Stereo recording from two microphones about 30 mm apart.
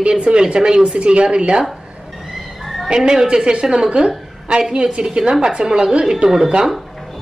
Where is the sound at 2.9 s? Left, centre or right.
Right.